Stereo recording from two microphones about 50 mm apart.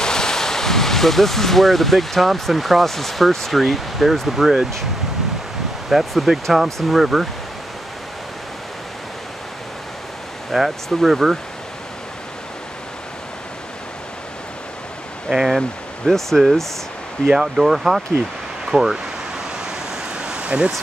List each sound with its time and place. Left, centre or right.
0.0 s speech: centre
5.9 s speech: centre
10.5 s speech: centre
15.2 s speech: centre
16.1 s speech: centre
17.3 s speech: centre
20.2 s a sound: centre